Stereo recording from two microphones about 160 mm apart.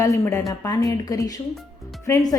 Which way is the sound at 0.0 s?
15° left (ahead or behind).